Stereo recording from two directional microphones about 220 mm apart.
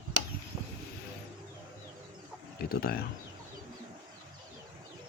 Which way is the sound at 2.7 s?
45° left (ahead or behind).